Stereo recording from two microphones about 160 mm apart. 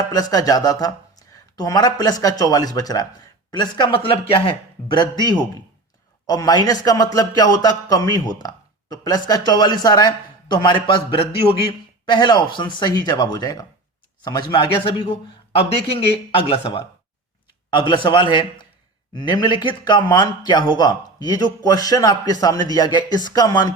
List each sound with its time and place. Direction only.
0.1 s a man's voice: 25° left (ahead or behind)
16.4 s a man's voice: 35° left (ahead or behind)